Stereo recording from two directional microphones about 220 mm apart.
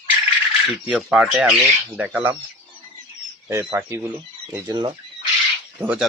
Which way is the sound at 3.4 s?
10° right (ahead or behind).